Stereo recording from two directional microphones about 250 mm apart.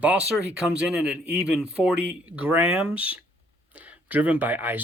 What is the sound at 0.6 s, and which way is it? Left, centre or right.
Speech, centre.